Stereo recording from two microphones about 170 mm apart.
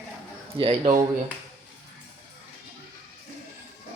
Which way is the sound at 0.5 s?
35° right (ahead or behind).